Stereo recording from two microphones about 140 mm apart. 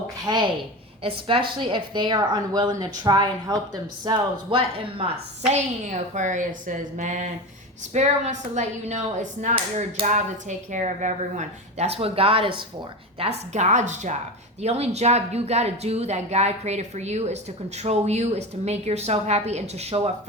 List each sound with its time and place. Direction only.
0.3 s a woman's voice: 30° right (ahead or behind)
1.5 s a woman's voice: 35° right (ahead or behind)
13.1 s a woman's voice: 50° right (ahead or behind)